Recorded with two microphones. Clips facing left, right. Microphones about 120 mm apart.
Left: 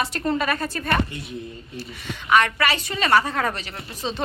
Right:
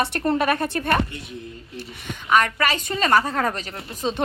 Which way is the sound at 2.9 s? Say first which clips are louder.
Right 1 dB; 40° right (ahead or behind).